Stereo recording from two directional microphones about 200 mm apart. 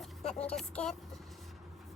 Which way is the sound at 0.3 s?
30° left (ahead or behind).